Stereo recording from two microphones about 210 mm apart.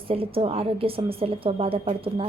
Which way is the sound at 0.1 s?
25° right (ahead or behind).